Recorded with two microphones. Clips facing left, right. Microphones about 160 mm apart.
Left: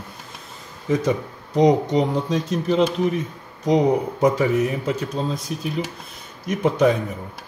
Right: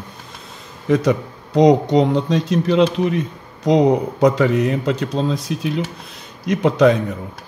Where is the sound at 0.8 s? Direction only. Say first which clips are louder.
Right 4 dB; 75° right (ahead or behind).